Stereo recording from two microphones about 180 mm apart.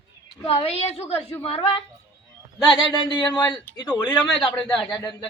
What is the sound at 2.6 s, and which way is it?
A man's voice, 25° left (ahead or behind).